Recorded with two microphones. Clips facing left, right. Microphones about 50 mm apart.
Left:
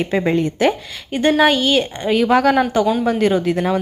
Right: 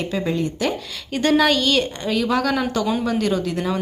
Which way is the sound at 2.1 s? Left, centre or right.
Left.